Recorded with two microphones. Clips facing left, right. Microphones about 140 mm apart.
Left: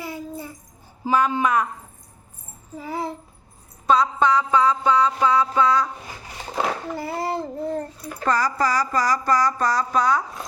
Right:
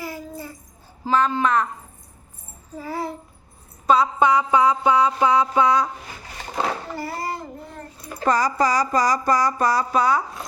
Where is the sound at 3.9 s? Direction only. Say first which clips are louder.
Right 1 dB; 10° right (ahead or behind).